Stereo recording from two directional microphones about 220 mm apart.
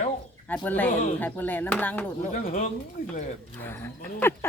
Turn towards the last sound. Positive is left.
turn(degrees=10)  # may be behind; listen again after turning